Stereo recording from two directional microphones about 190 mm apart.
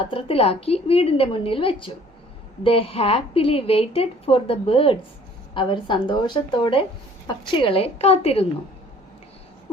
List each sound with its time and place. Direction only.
0.0 s a woman's voice: 30° left (ahead or behind)